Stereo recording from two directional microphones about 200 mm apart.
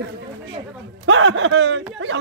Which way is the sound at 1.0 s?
70° right (ahead or behind).